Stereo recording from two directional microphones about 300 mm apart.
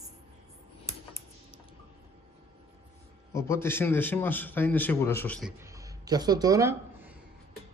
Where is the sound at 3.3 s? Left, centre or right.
Centre.